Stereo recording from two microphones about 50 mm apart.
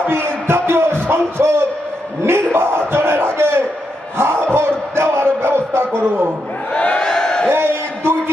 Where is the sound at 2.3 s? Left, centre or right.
Right.